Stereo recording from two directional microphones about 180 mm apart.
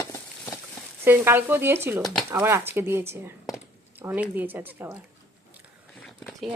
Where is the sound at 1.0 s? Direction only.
10° right (ahead or behind).